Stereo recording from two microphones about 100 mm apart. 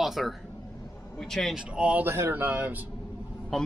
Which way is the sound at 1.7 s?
15° right (ahead or behind).